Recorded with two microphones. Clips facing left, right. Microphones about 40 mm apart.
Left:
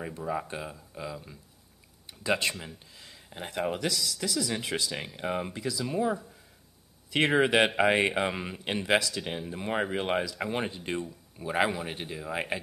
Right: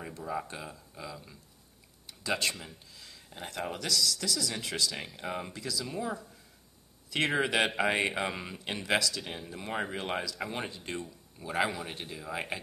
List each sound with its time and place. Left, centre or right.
0.0 s speech: centre
2.0 s a sound: centre
2.9 s speech: left